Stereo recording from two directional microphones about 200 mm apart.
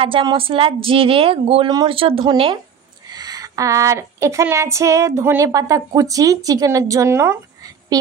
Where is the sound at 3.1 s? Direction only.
20° right (ahead or behind).